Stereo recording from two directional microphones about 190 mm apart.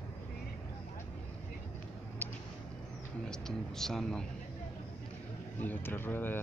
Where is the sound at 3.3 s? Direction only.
Centre (ahead or behind).